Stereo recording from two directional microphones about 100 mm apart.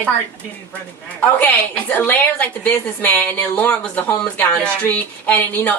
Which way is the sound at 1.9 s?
20° left (ahead or behind).